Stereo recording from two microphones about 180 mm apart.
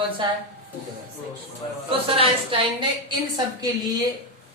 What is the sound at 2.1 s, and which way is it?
Speech, 30° right (ahead or behind).